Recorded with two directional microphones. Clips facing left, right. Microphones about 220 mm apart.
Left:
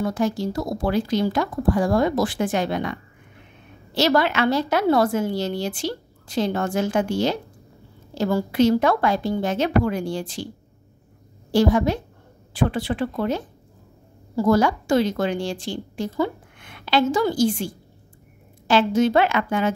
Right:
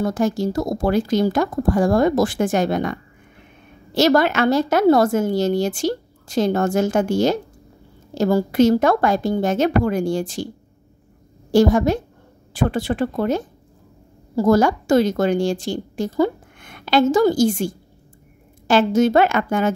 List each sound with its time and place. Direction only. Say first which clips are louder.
0.0 s a woman's voice: right 3 dB; 45° right (ahead or behind)
11.5 s a woman's voice: right 4 dB; 45° right (ahead or behind)